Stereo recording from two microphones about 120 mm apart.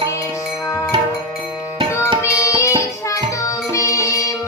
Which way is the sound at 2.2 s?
25° left (ahead or behind).